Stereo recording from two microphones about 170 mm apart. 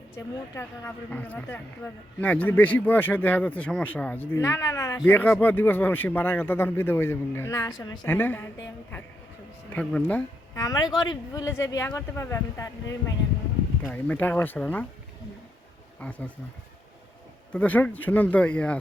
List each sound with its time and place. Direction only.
0.5 s speech: 15° left (ahead or behind)
9.7 s speech: 10° left (ahead or behind)
10.6 s speech: 20° left (ahead or behind)
16.0 s speech: 10° left (ahead or behind)
17.5 s speech: 10° left (ahead or behind)